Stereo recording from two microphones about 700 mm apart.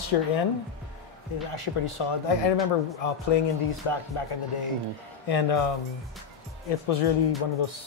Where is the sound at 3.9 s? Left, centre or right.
Left.